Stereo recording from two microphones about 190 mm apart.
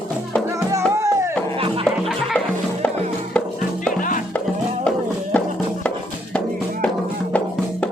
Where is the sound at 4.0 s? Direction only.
45° left (ahead or behind).